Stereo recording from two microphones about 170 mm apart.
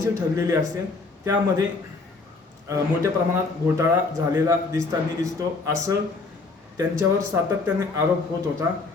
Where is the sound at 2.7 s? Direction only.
15° right (ahead or behind).